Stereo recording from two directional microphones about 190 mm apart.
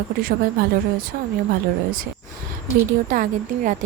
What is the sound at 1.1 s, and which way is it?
Speech, 50° right (ahead or behind).